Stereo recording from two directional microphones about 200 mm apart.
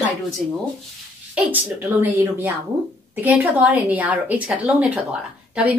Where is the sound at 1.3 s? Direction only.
10° right (ahead or behind).